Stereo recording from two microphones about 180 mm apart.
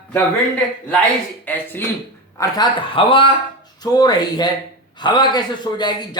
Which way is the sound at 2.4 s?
25° left (ahead or behind).